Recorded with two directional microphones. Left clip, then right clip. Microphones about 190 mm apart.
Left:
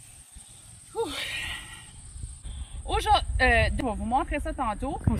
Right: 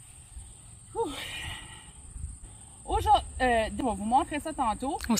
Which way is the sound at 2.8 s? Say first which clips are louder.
Even; 5° right (ahead or behind).